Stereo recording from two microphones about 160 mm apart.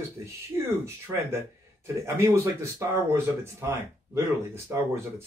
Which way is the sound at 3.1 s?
15° right (ahead or behind).